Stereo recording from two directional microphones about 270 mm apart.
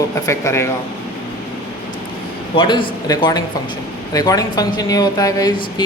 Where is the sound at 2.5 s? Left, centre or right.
Centre.